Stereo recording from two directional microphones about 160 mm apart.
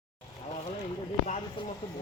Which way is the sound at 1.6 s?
30° left (ahead or behind).